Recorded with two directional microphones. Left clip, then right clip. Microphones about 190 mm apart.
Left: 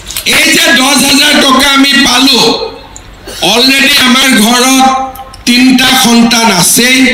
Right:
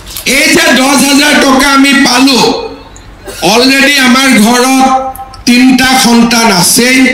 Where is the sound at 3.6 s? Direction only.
30° left (ahead or behind).